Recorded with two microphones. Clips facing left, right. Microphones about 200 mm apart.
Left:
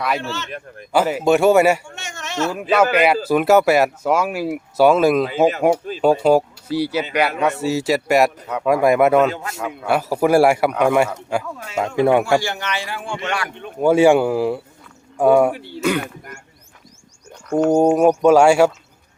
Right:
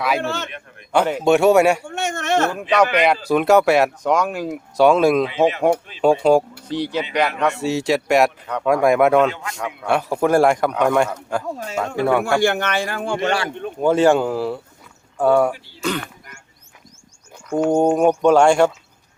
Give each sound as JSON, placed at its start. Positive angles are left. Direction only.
{"t": 0.2, "sound": "a man's voice", "side_deg": -55}
{"t": 0.9, "sound": "a man's voice", "side_deg": 5}
{"t": 1.8, "sound": "a sound", "side_deg": -55}
{"t": 2.5, "sound": "a man's voice", "side_deg": 5}
{"t": 9.3, "sound": "a man's voice", "side_deg": 40}
{"t": 9.6, "sound": "speech", "side_deg": 5}
{"t": 11.4, "sound": "speech", "side_deg": -35}
{"t": 11.9, "sound": "a man's voice", "side_deg": 20}
{"t": 12.4, "sound": "a man's voice", "side_deg": -55}
{"t": 13.8, "sound": "speech", "side_deg": 10}
{"t": 17.7, "sound": "speech", "side_deg": 5}